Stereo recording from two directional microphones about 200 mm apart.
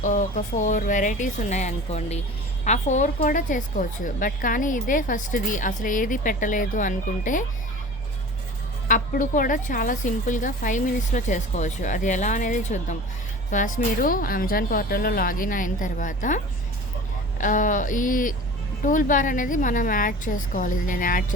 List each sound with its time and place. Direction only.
0.0 s a woman's voice: 40° left (ahead or behind)
8.9 s a woman's voice: 40° left (ahead or behind)